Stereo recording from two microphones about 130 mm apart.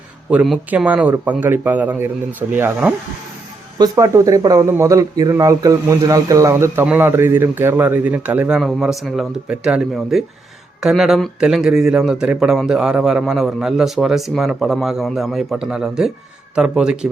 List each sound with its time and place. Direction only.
0.3 s a man's voice: 5° right (ahead or behind)